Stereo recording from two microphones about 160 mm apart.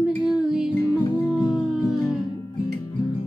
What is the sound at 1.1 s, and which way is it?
Music, 25° left (ahead or behind).